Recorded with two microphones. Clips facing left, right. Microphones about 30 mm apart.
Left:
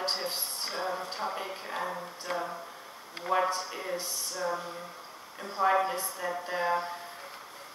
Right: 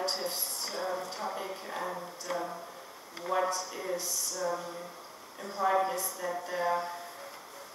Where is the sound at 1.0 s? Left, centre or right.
Left.